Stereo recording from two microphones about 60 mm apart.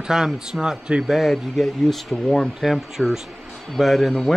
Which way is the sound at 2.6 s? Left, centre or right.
Centre.